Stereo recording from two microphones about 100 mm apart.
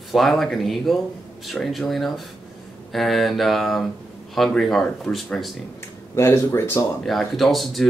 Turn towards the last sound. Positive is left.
turn(degrees=0)  # may be behind; listen again after turning